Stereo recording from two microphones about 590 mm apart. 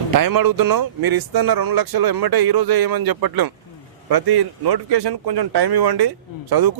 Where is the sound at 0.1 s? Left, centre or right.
Right.